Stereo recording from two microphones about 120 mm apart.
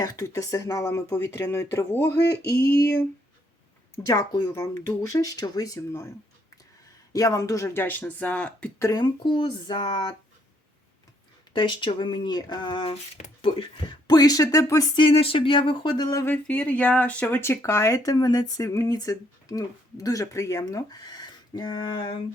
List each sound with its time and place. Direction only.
0.0 s speech: 30° left (ahead or behind)
3.9 s speech: 30° left (ahead or behind)
7.1 s speech: 30° left (ahead or behind); by 8.7 s 10° left (ahead or behind)
8.8 s speech: 35° left (ahead or behind)
11.5 s speech: 45° left (ahead or behind)
15.1 s speech: 50° left (ahead or behind); by 16.2 s 35° left (ahead or behind)
16.2 s speech: 15° left (ahead or behind); by 22.2 s 40° left (ahead or behind)